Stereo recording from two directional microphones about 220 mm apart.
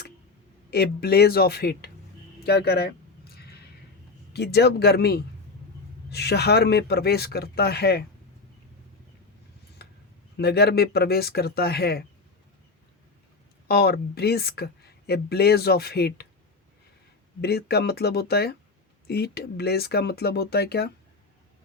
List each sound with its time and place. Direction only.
0.7 s speech: 45° left (ahead or behind)
2.5 s a sound: 45° left (ahead or behind)
4.3 s speech: 50° left (ahead or behind)
9.8 s a sound: 45° left (ahead or behind)
10.3 s speech: 45° left (ahead or behind)
13.7 s speech: 45° left (ahead or behind)
17.4 s speech: 45° left (ahead or behind)